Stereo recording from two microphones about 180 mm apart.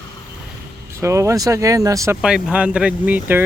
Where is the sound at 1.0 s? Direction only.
15° right (ahead or behind).